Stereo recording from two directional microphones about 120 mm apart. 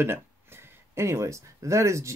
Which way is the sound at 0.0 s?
20° right (ahead or behind).